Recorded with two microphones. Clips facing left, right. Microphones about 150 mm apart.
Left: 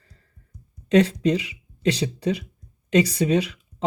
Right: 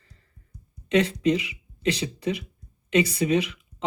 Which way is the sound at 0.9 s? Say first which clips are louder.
Left 3 dB; 35° left (ahead or behind).